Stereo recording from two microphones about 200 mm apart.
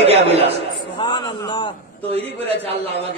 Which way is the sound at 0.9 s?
25° left (ahead or behind).